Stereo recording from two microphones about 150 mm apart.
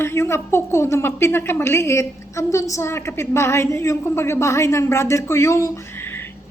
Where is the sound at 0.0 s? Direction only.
15° left (ahead or behind).